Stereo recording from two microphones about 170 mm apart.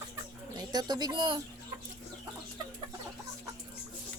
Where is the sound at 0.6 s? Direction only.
25° right (ahead or behind).